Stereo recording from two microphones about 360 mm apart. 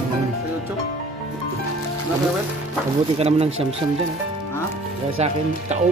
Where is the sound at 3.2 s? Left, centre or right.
Centre.